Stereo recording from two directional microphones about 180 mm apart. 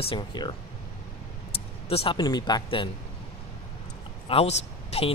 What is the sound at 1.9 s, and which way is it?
Speech, 30° left (ahead or behind).